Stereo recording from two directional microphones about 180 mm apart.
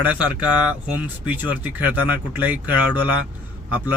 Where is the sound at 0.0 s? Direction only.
5° right (ahead or behind).